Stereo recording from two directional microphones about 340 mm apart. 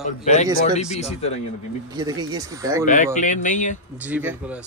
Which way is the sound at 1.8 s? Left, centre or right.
Centre.